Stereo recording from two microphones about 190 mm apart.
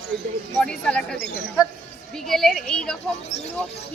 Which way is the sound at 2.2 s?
Centre (ahead or behind).